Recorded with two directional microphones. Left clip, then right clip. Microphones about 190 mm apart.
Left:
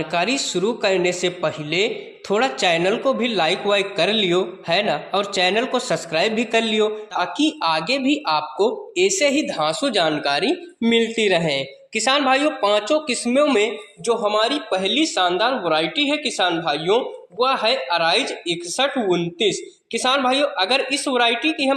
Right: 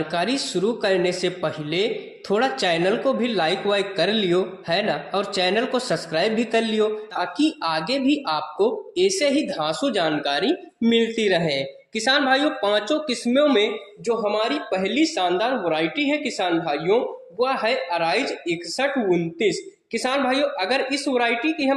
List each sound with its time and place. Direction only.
0.1 s speech: 15° left (ahead or behind)